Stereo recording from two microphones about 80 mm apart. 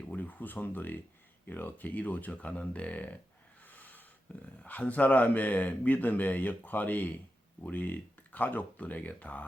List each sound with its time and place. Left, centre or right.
0.0 s a sound: centre
1.5 s speech: left
3.7 s snort: left
4.3 s speech: centre